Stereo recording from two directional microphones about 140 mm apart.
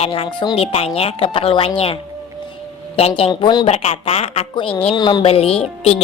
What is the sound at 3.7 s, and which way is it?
A woman's voice, 45° left (ahead or behind).